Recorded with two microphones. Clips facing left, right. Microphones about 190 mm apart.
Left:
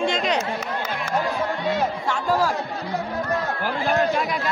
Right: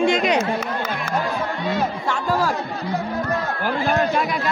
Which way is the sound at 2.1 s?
65° right (ahead or behind).